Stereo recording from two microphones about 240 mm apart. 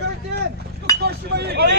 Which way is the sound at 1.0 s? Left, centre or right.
Right.